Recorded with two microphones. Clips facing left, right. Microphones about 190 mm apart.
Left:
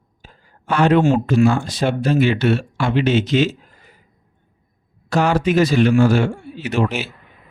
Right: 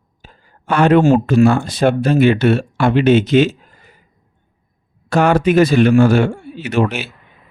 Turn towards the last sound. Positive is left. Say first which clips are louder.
# right 3 dB
turn(degrees=-60)  # may be behind; listen again after turning